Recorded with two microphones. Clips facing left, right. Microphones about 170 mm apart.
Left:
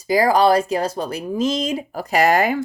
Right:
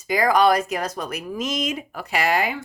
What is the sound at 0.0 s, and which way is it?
Speech, 35° left (ahead or behind).